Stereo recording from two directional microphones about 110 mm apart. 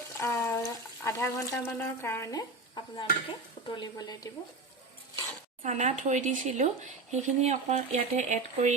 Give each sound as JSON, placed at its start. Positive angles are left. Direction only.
{"t": 0.2, "sound": "a sound", "side_deg": 30}
{"t": 2.3, "sound": "dishes", "side_deg": 45}
{"t": 3.8, "sound": "speech", "side_deg": 35}
{"t": 5.6, "sound": "speech", "side_deg": -90}